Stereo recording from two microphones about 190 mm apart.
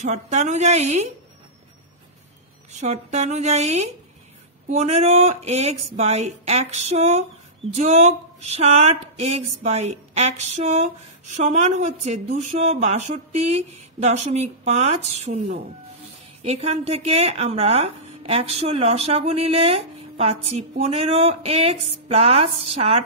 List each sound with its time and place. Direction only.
0.0 s speech: 35° right (ahead or behind)
2.7 s speech: 35° right (ahead or behind)